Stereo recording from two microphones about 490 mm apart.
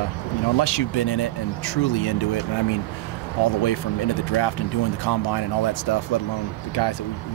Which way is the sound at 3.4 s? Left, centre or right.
Left.